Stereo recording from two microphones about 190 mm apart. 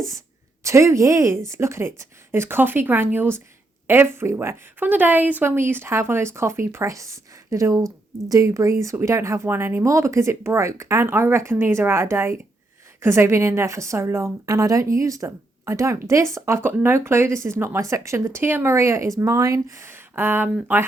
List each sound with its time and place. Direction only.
0.6 s a woman's voice: 15° right (ahead or behind)